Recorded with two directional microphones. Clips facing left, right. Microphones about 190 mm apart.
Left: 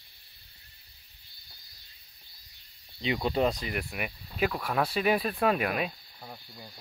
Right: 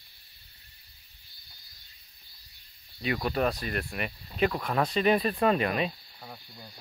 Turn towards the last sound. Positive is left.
turn(degrees=5)  # may be behind; listen again after turning